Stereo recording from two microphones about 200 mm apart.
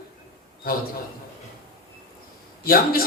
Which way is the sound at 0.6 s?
50° left (ahead or behind).